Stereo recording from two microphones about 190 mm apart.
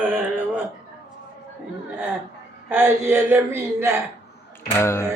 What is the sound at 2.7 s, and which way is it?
A man's voice, 10° right (ahead or behind).